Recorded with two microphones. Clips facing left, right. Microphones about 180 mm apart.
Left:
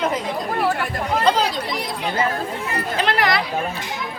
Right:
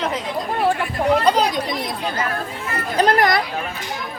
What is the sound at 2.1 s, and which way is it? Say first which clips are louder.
Chatter: left 3 dB; 25° left (ahead or behind).